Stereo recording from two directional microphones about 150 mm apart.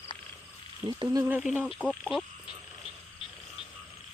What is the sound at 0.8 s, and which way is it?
Speech, 30° right (ahead or behind).